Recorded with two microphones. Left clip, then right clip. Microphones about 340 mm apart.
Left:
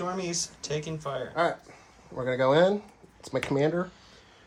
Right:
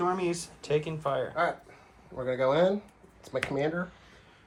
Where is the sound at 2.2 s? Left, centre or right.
Left.